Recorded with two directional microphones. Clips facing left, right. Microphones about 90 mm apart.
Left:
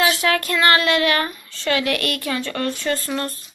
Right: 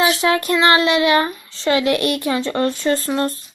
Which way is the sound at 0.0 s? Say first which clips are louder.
Right 3 dB; 20° right (ahead or behind).